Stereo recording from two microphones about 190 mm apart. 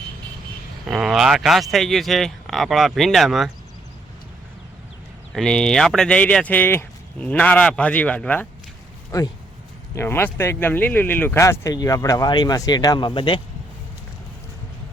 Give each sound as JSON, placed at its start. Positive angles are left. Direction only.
{"t": 0.9, "sound": "speech", "side_deg": 0}
{"t": 5.3, "sound": "speech", "side_deg": 5}
{"t": 9.1, "sound": "speech", "side_deg": 20}